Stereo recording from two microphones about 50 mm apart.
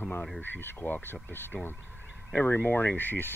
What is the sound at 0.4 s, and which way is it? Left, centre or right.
Speech, left.